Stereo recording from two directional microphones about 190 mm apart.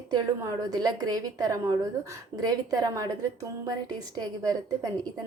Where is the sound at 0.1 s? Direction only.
20° right (ahead or behind).